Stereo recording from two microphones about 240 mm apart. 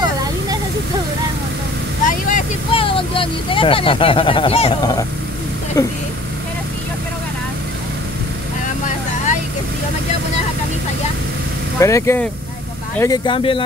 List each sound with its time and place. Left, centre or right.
0.0 s a sound: centre
2.0 s vehicle: left
2.8 s speech: left
11.8 s speech: centre